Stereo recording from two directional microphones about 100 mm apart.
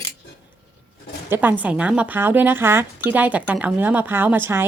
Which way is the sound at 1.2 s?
20° right (ahead or behind).